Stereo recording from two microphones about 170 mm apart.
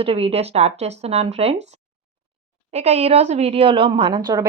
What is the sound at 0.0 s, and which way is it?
A woman's voice, 35° right (ahead or behind).